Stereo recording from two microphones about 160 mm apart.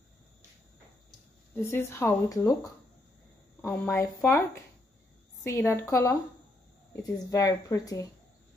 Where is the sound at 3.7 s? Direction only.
15° left (ahead or behind).